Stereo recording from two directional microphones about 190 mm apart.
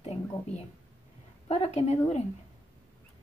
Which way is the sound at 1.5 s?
35° left (ahead or behind).